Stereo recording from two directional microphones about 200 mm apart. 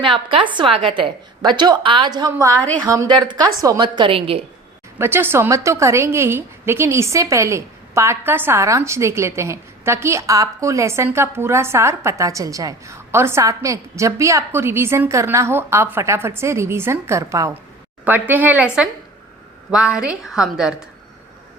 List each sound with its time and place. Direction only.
0.0 s a woman's voice: 25° right (ahead or behind)
4.9 s a woman's voice: 10° right (ahead or behind)